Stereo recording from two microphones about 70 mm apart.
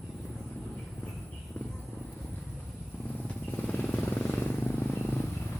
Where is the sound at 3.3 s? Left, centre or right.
Left.